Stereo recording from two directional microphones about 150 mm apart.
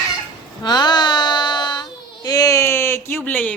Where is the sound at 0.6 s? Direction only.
30° left (ahead or behind); by 3.5 s 10° left (ahead or behind).